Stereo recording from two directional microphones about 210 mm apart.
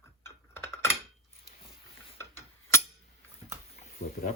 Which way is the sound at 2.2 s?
10° left (ahead or behind).